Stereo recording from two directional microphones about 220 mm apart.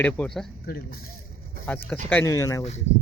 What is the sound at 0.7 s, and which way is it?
Speech, 45° left (ahead or behind).